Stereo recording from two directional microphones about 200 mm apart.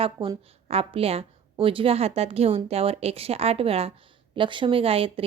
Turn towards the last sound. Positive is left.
turn(degrees=-30)  # may be behind; listen again after turning